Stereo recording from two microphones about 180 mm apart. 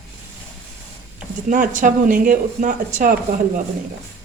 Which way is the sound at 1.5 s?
45° right (ahead or behind).